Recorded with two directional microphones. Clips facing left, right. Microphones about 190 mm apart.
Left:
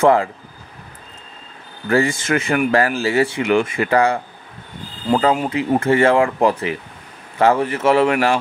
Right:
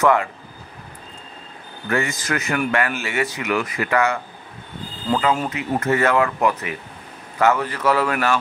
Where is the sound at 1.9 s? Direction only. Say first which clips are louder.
Left 6 dB; 30° left (ahead or behind).